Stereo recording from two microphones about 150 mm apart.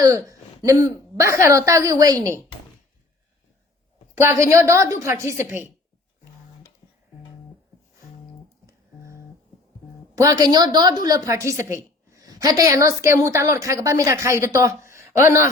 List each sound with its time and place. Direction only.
0.3 s a woman's voice: 20° right (ahead or behind)
4.2 s a woman's voice: 20° right (ahead or behind)
10.2 s a woman's voice: 25° right (ahead or behind)